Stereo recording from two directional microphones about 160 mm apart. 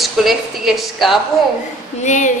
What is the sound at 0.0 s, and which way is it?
A woman's voice, centre (ahead or behind).